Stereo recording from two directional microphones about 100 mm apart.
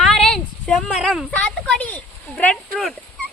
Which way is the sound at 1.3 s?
10° left (ahead or behind).